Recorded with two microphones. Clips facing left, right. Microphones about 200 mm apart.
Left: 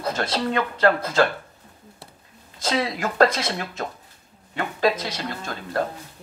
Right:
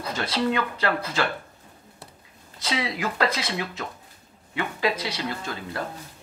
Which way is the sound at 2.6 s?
45° left (ahead or behind).